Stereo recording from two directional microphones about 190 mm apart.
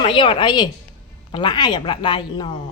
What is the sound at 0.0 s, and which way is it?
Speech, 25° left (ahead or behind).